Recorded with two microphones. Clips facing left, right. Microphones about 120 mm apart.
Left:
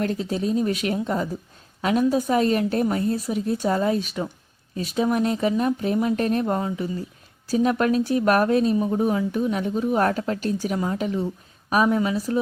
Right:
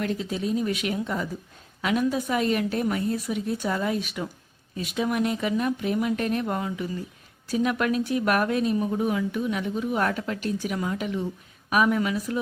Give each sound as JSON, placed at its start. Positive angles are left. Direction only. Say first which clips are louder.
{"t": 0.0, "sound": "speech", "louder": "left 3 dB", "side_deg": 40}